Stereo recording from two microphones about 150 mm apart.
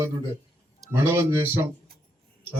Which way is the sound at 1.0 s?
15° right (ahead or behind).